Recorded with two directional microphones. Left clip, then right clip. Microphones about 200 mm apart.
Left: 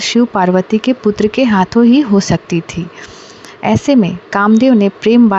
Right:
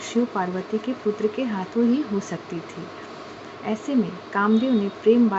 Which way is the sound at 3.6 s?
50° left (ahead or behind).